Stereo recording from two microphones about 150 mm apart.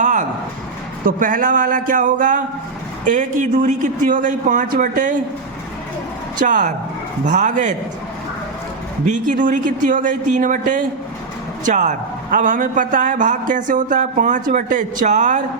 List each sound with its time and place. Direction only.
0.0 s a sound: 55° right (ahead or behind)
1.0 s a man's voice: 65° right (ahead or behind)
6.4 s a man's voice: 60° right (ahead or behind)
9.0 s a man's voice: 60° right (ahead or behind)